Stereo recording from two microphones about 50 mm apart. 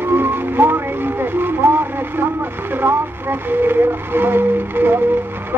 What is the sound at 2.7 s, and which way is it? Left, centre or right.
Speech, right.